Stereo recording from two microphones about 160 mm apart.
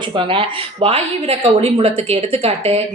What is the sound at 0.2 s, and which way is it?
A woman's voice, 30° right (ahead or behind).